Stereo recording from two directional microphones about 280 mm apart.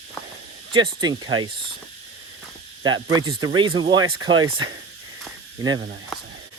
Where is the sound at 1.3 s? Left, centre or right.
Right.